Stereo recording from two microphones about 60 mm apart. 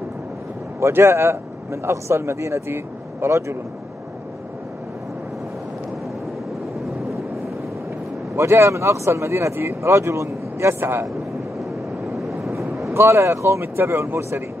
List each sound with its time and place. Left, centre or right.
0.7 s a man's voice: right
8.4 s speech: right
12.2 s vehicle: centre
12.5 s vehicle: right
12.9 s speech: right